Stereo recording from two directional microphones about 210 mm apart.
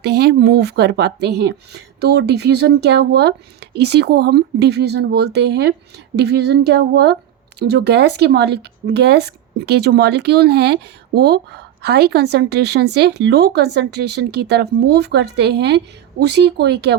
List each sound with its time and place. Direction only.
0.0 s speech: 50° right (ahead or behind)